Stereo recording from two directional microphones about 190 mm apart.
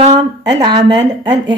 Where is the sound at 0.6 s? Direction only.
20° right (ahead or behind).